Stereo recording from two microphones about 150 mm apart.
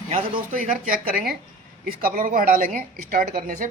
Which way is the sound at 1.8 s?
70° right (ahead or behind).